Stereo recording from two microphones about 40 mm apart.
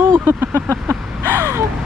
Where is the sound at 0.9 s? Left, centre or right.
Right.